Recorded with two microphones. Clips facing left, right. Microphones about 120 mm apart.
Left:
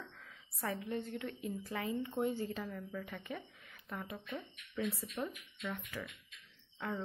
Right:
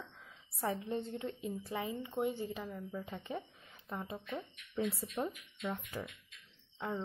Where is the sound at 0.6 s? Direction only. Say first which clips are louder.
Right 2 dB; 25° right (ahead or behind).